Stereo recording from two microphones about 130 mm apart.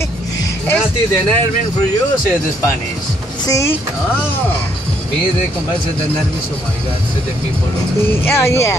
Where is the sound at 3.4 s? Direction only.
25° left (ahead or behind).